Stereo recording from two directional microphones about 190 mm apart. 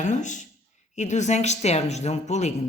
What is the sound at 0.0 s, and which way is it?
Speech, 40° left (ahead or behind).